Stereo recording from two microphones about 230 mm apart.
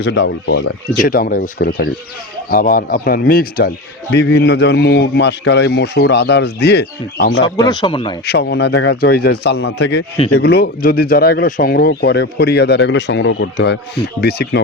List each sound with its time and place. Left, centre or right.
0.0 s speech: left
1.0 s a man's voice: left
7.4 s speech: centre
8.2 s speech: left